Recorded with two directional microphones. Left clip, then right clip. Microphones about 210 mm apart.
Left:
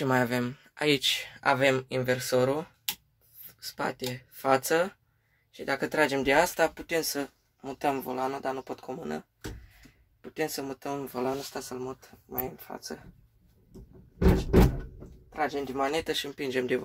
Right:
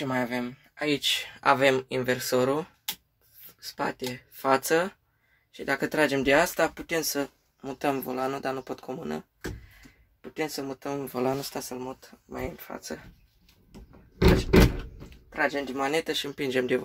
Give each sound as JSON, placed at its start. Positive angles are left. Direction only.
{"t": 0.0, "sound": "speech", "side_deg": 40}
{"t": 1.1, "sound": "speech", "side_deg": 0}
{"t": 10.2, "sound": "speech", "side_deg": 5}
{"t": 11.7, "sound": "speech", "side_deg": 5}
{"t": 15.2, "sound": "speech", "side_deg": 5}